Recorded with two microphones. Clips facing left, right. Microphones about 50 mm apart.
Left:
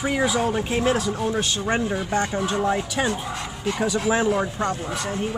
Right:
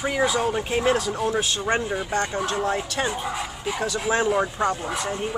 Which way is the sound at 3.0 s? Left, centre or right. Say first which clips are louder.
Even; centre.